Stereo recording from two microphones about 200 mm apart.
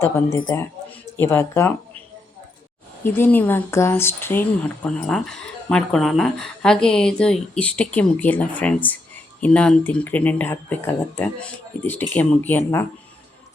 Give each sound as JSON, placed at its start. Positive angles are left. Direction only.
{"t": 0.0, "sound": "speech", "side_deg": 15}
{"t": 3.0, "sound": "speech", "side_deg": 10}